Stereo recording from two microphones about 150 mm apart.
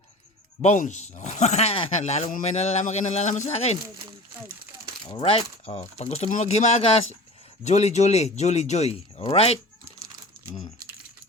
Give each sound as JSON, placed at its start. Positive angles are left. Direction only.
{"t": 0.6, "sound": "speech", "side_deg": 50}
{"t": 5.2, "sound": "speech", "side_deg": 45}